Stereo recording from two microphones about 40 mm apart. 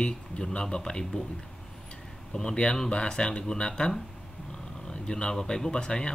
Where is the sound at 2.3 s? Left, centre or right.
Left.